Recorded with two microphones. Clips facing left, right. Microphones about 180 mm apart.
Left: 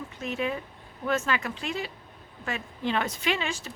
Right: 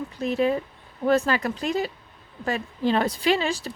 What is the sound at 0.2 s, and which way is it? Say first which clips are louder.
A woman's voice: right 8 dB; 35° right (ahead or behind).